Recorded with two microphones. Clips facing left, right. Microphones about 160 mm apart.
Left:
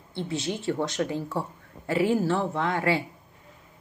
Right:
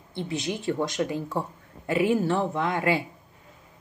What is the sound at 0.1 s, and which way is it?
Speech, 15° right (ahead or behind).